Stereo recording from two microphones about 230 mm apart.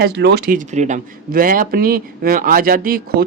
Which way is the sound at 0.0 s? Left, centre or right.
Right.